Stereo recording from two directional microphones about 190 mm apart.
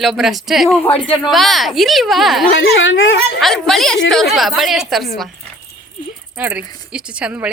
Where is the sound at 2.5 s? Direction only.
85° left.